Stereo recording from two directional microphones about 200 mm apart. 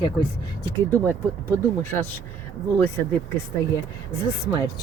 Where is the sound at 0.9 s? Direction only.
10° left (ahead or behind).